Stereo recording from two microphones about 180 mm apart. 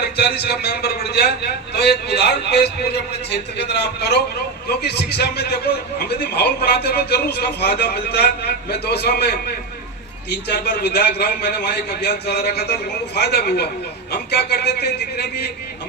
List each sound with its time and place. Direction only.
0.0 s a man's voice: 65° left (ahead or behind)